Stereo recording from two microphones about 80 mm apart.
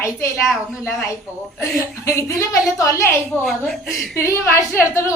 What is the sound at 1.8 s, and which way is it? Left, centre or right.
A woman's voice, left.